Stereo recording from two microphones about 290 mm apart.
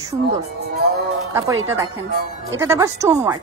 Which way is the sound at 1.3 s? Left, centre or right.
Centre.